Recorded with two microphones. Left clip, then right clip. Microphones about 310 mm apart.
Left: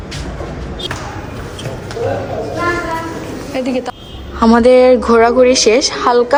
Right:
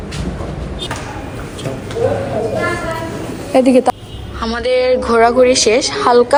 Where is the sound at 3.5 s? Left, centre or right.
Centre.